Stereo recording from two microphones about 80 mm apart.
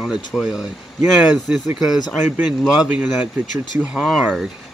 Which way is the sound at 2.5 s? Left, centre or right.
Centre.